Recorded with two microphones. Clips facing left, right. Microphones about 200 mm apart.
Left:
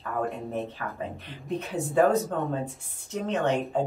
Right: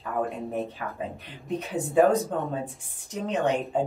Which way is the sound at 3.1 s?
15° right (ahead or behind).